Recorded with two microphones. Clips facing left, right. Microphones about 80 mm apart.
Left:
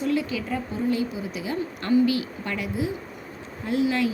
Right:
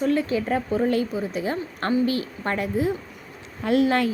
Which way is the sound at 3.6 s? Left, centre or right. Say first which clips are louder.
Right 3 dB; right.